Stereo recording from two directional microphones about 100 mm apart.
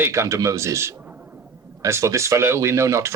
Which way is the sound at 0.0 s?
30° right (ahead or behind).